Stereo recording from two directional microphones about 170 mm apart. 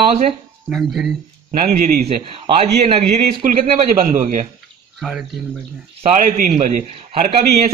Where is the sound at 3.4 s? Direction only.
50° right (ahead or behind).